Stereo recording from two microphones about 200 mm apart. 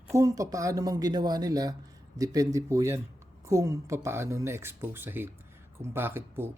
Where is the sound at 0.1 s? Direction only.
15° right (ahead or behind).